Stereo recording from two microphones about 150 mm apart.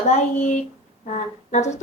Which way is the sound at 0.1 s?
55° left (ahead or behind).